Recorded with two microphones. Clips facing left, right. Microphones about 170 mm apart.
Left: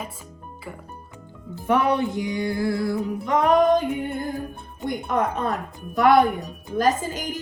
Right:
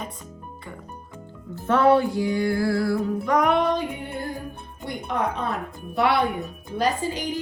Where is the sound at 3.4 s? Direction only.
40° left (ahead or behind).